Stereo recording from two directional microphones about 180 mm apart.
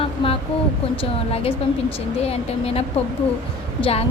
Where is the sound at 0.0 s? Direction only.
30° left (ahead or behind).